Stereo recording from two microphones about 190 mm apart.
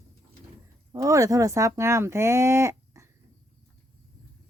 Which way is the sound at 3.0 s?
15° right (ahead or behind).